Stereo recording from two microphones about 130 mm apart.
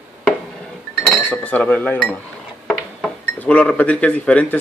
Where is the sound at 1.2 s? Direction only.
10° left (ahead or behind).